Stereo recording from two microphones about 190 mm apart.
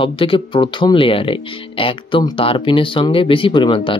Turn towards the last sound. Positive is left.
turn(degrees=25)  # may be behind; listen again after turning